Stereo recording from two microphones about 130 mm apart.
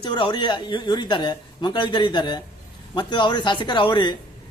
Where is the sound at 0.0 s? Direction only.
40° left (ahead or behind).